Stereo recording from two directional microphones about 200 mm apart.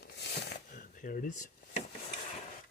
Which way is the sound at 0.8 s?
45° left (ahead or behind).